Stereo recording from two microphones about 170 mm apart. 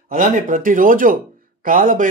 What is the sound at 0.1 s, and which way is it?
Speech, 50° right (ahead or behind).